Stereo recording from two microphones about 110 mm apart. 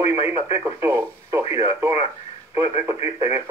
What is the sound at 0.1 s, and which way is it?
Speech, 25° right (ahead or behind).